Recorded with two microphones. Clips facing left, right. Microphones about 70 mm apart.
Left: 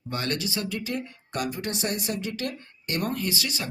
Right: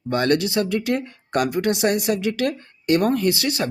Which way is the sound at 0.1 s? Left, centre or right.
Right.